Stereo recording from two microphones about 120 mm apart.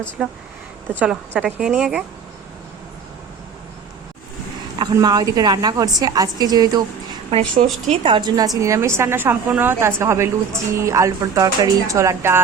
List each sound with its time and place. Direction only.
0.2 s a woman's voice: 10° right (ahead or behind)
4.8 s a woman's voice: 35° right (ahead or behind)
7.5 s a woman's voice: 90° right
8.0 s a woman's voice: 40° right (ahead or behind); by 12.4 s 20° right (ahead or behind)